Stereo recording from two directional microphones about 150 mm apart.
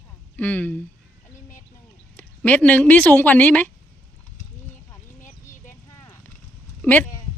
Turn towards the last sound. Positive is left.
turn(degrees=10)  # may be behind; listen again after turning